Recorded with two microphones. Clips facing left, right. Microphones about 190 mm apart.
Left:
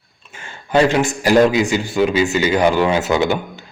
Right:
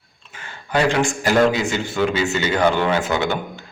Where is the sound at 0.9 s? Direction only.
15° left (ahead or behind).